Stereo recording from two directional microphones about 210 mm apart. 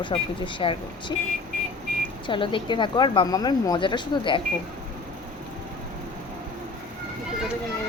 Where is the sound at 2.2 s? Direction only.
25° left (ahead or behind).